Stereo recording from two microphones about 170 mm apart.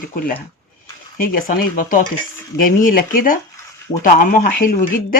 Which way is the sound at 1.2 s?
55° left (ahead or behind).